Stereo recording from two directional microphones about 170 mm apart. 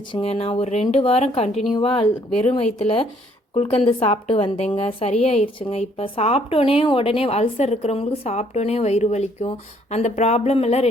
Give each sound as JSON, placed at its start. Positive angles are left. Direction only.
{"t": 0.1, "sound": "a woman's voice", "side_deg": 35}